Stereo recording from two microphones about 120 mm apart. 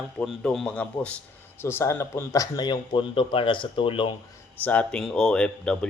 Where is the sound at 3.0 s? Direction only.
45° left (ahead or behind).